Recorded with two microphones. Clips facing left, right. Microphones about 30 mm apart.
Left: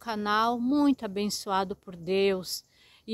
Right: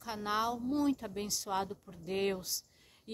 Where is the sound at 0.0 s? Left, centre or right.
Left.